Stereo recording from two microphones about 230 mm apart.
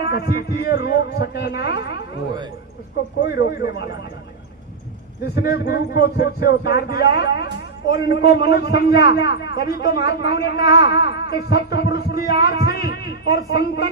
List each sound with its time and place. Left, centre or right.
0.1 s speech: left
3.2 s speech: left
5.2 s speech: left